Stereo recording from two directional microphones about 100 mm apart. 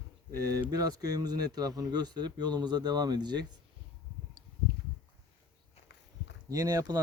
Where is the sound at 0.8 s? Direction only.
40° right (ahead or behind).